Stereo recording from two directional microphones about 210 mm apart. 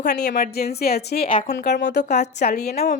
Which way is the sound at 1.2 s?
40° left (ahead or behind).